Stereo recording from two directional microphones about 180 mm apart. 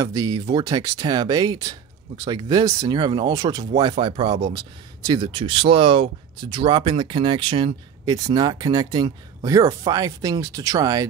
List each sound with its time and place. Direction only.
0.0 s speech: 20° right (ahead or behind)